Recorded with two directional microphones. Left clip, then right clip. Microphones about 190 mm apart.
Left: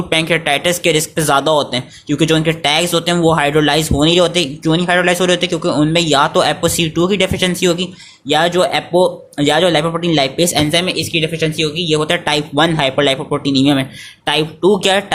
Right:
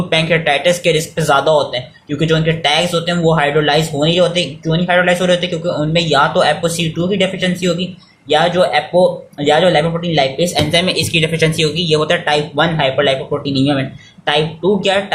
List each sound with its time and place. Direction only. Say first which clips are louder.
0.1 s speech: right 1 dB; 40° left (ahead or behind)